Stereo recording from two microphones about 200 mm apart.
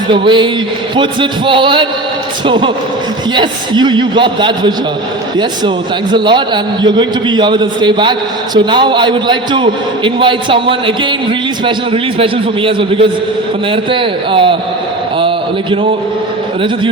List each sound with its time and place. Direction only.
0.1 s a man's voice: 25° right (ahead or behind)